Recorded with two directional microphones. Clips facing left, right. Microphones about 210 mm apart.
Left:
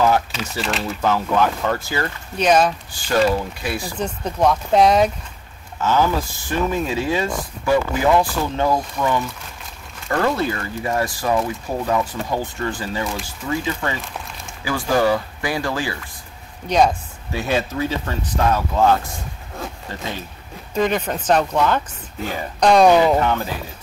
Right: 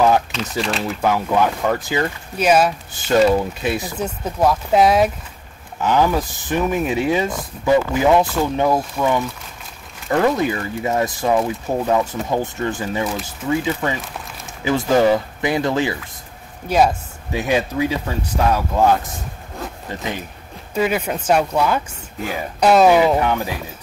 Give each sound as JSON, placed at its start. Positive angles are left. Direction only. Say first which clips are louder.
{"t": 0.3, "sound": "speech", "louder": "right 2 dB", "side_deg": 5}
{"t": 1.0, "sound": "speech", "louder": "right 1 dB", "side_deg": -10}
{"t": 2.3, "sound": "speech", "louder": "right 1 dB", "side_deg": -5}
{"t": 2.9, "sound": "speech", "louder": "right 3 dB", "side_deg": -20}
{"t": 4.0, "sound": "speech", "louder": "even", "side_deg": -5}
{"t": 5.8, "sound": "speech", "louder": "right 2 dB", "side_deg": -15}
{"t": 10.0, "sound": "speech", "louder": "right 3 dB", "side_deg": -15}
{"t": 16.6, "sound": "speech", "louder": "right 1 dB", "side_deg": -5}
{"t": 20.0, "sound": "speech", "louder": "right 2 dB", "side_deg": -15}